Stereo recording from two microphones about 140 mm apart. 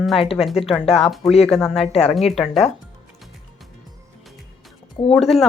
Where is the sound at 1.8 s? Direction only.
50° left (ahead or behind).